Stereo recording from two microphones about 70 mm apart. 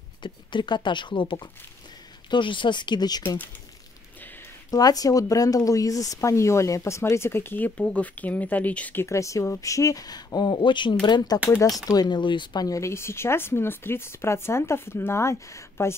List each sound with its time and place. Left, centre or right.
0.2 s speech: left
4.6 s speech: left
7.7 s speech: centre
9.0 s speech: left
11.6 s speech: left